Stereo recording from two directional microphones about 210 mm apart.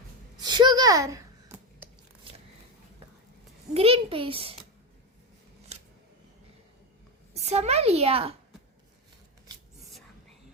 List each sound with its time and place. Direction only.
0.4 s a sound: 20° right (ahead or behind)
3.8 s a child's voice: 25° right (ahead or behind)
7.3 s a child's voice: 30° right (ahead or behind)